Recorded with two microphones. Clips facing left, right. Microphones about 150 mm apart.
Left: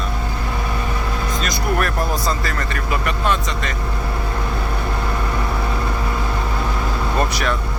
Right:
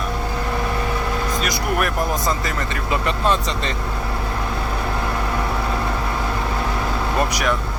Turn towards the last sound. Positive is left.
turn(degrees=-15)  # may be behind; listen again after turning